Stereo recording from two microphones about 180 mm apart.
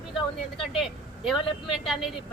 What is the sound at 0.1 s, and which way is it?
Speech, 30° left (ahead or behind).